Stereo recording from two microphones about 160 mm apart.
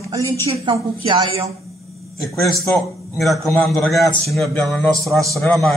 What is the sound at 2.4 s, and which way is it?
A man's voice, centre (ahead or behind).